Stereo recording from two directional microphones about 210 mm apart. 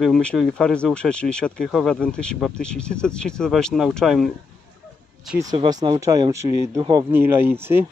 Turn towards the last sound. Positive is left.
turn(degrees=-10)  # may be behind; listen again after turning